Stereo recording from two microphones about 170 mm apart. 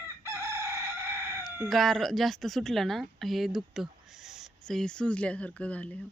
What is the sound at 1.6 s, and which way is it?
A woman's voice, centre (ahead or behind).